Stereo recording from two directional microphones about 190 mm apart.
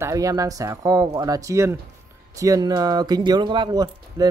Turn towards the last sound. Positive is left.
turn(degrees=-20)  # may be behind; listen again after turning